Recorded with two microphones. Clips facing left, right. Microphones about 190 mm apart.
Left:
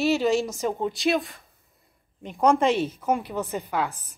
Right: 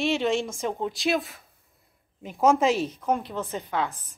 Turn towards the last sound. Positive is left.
turn(degrees=10)  # may be behind; listen again after turning